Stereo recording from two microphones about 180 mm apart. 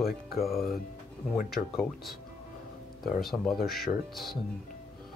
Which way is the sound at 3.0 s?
Centre (ahead or behind).